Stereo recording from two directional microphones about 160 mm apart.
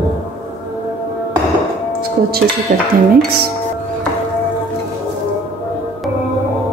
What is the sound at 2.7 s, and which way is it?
Speech, 55° right (ahead or behind).